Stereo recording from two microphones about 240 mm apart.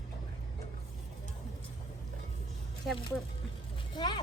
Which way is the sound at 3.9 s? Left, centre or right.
Centre.